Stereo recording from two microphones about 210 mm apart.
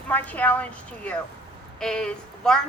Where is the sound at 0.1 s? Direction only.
10° left (ahead or behind).